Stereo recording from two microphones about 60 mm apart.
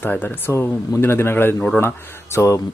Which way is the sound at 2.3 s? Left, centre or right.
Left.